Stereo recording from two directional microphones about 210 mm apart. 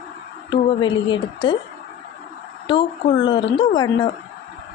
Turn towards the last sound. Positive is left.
turn(degrees=20)  # may be behind; listen again after turning